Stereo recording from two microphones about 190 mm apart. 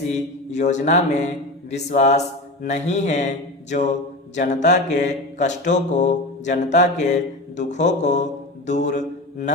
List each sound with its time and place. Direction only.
0.1 s mantra: 40° left (ahead or behind)